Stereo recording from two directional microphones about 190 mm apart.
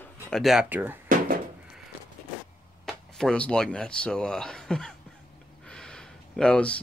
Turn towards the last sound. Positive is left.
turn(degrees=5)  # may be behind; listen again after turning